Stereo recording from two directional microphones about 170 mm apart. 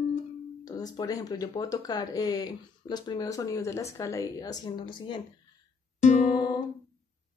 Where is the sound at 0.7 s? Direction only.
20° left (ahead or behind).